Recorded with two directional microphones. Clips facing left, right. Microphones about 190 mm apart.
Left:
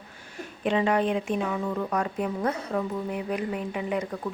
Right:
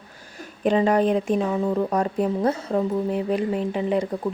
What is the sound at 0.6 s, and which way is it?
Speech, 40° right (ahead or behind).